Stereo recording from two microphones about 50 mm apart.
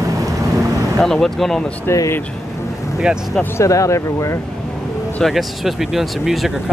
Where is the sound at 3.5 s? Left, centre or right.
Left.